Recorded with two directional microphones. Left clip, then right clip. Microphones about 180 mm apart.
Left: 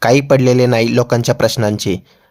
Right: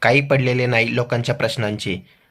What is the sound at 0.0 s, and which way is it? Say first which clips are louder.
Speech: left 5 dB; 45° left (ahead or behind).